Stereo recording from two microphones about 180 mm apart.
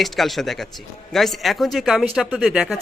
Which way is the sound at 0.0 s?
Centre (ahead or behind).